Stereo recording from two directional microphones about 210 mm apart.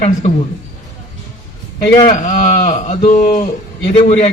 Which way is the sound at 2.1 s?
35° left (ahead or behind).